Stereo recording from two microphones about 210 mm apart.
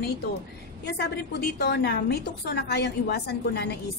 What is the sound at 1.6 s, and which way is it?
A woman's voice, 50° left (ahead or behind).